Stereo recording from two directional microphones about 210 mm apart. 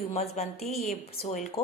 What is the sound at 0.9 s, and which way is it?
Speech, 35° left (ahead or behind).